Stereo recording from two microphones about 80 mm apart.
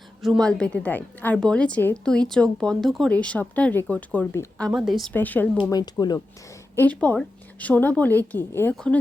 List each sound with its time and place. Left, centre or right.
0.2 s a woman's voice: centre
0.4 s a woman's voice: centre
1.4 s speech: centre
3.1 s a woman's voice: centre
4.7 s a woman's voice: centre
5.1 s a woman's voice: left
5.7 s speech: left
6.7 s a woman's voice: centre